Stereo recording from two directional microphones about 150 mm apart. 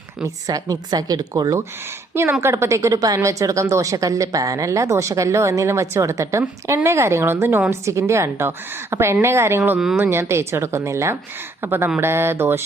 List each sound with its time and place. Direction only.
0.2 s a woman's voice: 25° right (ahead or behind); by 10.0 s 5° right (ahead or behind)
10.0 s a woman's voice: 15° right (ahead or behind)